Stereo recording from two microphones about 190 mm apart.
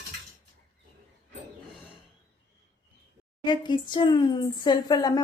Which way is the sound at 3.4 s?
25° left (ahead or behind).